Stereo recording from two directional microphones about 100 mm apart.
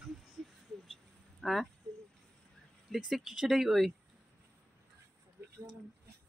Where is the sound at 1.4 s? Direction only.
Centre (ahead or behind).